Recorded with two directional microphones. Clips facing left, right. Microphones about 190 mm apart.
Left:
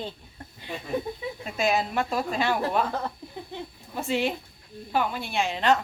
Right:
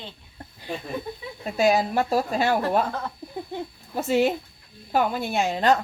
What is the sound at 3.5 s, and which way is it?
A woman's voice, 40° right (ahead or behind).